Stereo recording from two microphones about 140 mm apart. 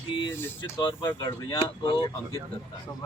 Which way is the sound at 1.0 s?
25° left (ahead or behind).